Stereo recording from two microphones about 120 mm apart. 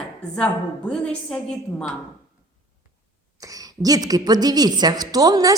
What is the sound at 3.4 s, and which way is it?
A woman's voice, 30° right (ahead or behind).